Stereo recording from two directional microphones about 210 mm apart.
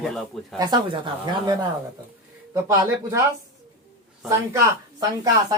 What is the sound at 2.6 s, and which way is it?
Speech, 15° right (ahead or behind).